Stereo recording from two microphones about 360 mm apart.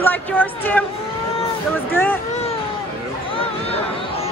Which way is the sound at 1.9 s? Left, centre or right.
Centre.